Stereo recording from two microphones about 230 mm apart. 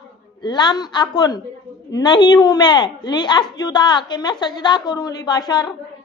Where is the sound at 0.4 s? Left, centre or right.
Centre.